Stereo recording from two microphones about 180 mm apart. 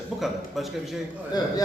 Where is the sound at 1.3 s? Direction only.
20° left (ahead or behind).